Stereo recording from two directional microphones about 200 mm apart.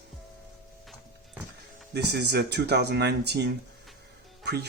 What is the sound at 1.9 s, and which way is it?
Speech, 55° right (ahead or behind).